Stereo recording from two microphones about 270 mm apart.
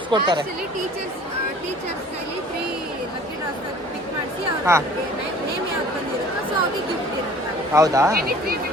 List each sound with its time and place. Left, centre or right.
0.1 s speech: centre
4.7 s speech: centre
7.7 s speech: centre
8.1 s speech: right